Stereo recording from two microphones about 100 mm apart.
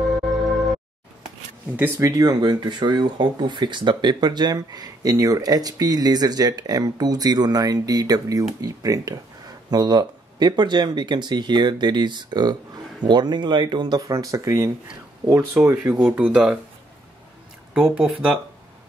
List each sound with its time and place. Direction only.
0.0 s music: centre (ahead or behind)
1.8 s speech: 30° right (ahead or behind)
15.6 s speech: 15° right (ahead or behind)
17.7 s speech: 10° right (ahead or behind)